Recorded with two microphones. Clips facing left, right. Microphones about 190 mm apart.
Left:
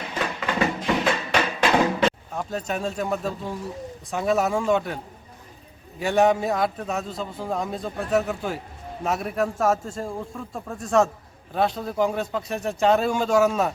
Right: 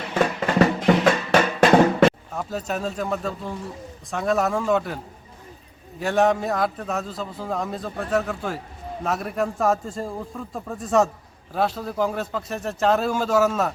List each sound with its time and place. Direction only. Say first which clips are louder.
0.3 s music: right 3 dB; 40° right (ahead or behind)
2.3 s a man's voice: even; centre (ahead or behind)
6.0 s a man's voice: even; centre (ahead or behind)